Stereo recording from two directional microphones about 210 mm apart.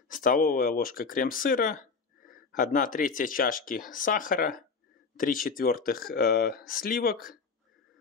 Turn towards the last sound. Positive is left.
turn(degrees=45)  # may be behind; listen again after turning